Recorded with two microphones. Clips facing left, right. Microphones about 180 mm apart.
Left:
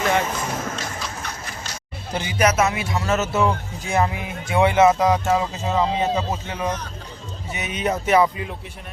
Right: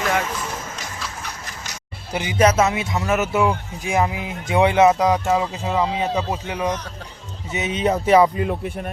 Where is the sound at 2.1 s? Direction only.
15° right (ahead or behind).